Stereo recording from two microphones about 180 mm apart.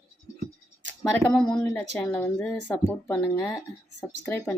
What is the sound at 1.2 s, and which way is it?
Speech, centre (ahead or behind).